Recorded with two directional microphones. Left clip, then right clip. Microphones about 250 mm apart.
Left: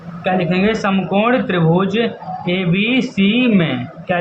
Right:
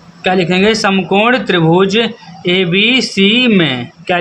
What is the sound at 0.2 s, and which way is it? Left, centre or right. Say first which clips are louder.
Speech: right 5 dB; right.